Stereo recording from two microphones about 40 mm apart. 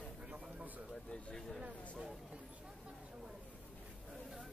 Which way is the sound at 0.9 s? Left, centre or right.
Left.